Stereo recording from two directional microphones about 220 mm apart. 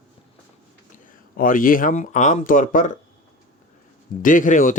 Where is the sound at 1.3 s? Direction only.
40° left (ahead or behind).